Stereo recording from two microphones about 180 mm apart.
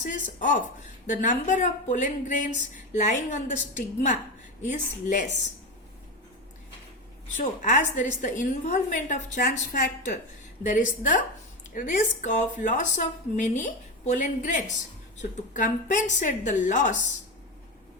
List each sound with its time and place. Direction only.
0.0 s speech: 45° left (ahead or behind)
7.3 s speech: 45° left (ahead or behind)